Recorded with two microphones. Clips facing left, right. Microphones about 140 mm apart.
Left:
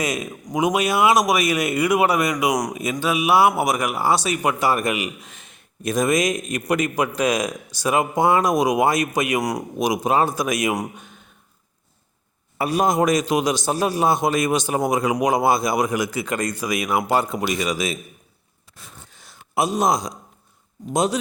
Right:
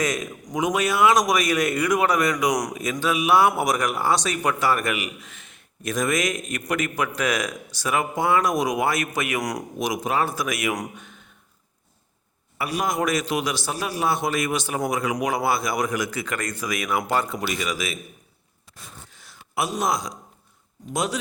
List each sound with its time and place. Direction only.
0.0 s a man's voice: 10° left (ahead or behind)
9.4 s a man's voice: 5° left (ahead or behind)
12.5 s a man's voice: 25° left (ahead or behind)
19.2 s a sound: 20° left (ahead or behind)
20.9 s a man's voice: 20° left (ahead or behind)